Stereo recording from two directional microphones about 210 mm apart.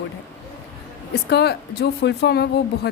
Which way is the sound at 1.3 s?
50° left (ahead or behind).